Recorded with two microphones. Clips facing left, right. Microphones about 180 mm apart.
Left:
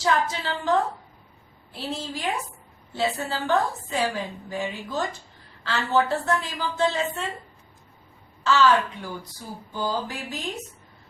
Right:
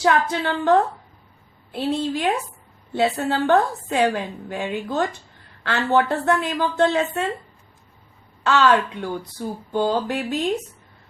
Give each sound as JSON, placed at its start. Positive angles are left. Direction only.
{"t": 0.0, "sound": "a woman's voice", "side_deg": -60}
{"t": 8.4, "sound": "a woman's voice", "side_deg": -60}